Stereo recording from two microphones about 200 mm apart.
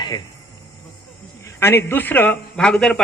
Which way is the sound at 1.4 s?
10° left (ahead or behind).